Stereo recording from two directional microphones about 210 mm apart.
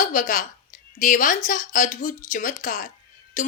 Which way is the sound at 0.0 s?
40° left (ahead or behind).